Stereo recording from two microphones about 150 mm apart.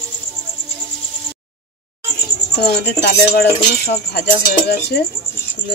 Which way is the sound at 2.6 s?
90° left.